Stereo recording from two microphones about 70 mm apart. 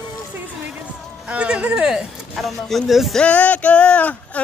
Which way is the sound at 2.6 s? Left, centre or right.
Centre.